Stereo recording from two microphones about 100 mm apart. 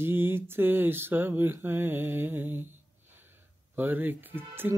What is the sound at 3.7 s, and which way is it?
Mantra, 20° right (ahead or behind).